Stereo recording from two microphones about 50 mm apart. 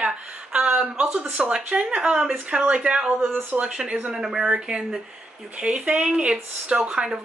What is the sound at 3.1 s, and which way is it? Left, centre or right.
Speech, right.